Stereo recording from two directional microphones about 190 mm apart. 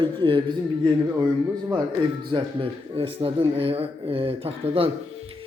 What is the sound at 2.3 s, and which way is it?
A man's voice, 25° right (ahead or behind).